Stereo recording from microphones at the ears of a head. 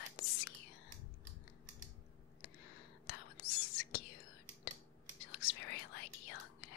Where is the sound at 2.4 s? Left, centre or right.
Left.